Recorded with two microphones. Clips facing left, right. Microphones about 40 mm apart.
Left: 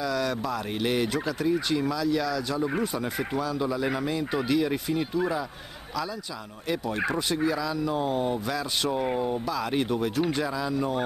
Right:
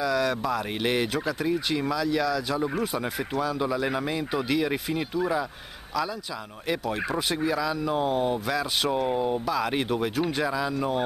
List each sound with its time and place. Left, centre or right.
0.0 s speech: centre
0.7 s speech: centre
7.2 s speech: centre